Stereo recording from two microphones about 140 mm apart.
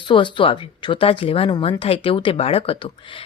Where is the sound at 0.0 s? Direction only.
35° left (ahead or behind).